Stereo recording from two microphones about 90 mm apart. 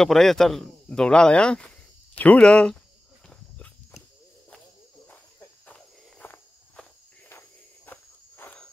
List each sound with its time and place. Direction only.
0.0 s speech: 5° left (ahead or behind)
3.3 s walk: 15° left (ahead or behind)
5.7 s walk: 15° left (ahead or behind)